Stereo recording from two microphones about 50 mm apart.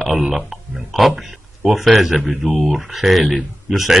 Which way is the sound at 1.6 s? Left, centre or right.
Centre.